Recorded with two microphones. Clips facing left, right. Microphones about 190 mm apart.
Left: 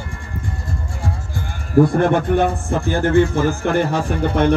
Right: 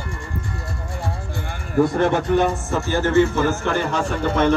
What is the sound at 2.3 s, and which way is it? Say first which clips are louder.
Speech: left 1 dB; 55° left (ahead or behind).